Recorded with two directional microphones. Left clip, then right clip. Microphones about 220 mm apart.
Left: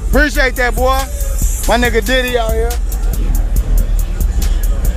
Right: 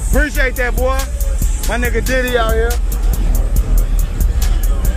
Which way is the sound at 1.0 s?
Centre (ahead or behind).